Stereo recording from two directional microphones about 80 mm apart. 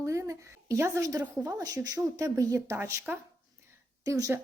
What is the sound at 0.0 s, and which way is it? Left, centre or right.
A woman's voice, right.